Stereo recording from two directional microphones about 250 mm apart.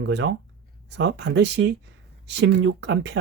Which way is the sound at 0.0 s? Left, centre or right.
Right.